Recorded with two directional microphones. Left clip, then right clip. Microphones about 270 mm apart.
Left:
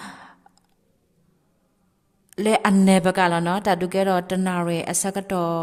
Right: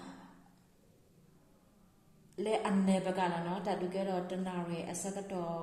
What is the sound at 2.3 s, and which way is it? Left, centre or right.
A woman's voice, left.